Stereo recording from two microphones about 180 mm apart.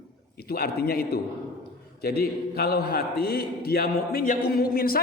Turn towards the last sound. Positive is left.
turn(degrees=55)  # may be behind; listen again after turning